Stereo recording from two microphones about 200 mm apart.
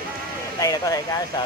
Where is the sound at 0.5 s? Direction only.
20° left (ahead or behind).